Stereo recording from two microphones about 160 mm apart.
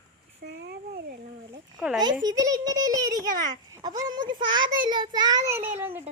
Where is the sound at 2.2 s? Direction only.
25° right (ahead or behind).